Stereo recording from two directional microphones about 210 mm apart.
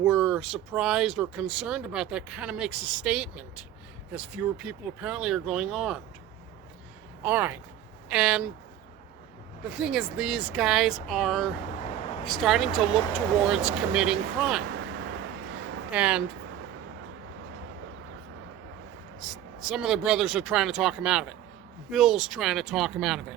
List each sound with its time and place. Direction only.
0.0 s speech: 5° right (ahead or behind)
7.2 s speech: 10° right (ahead or behind)
9.6 s speech: 5° right (ahead or behind)
14.7 s vehicle: 55° right (ahead or behind)
15.9 s speech: 5° right (ahead or behind)
19.3 s speech: centre (ahead or behind)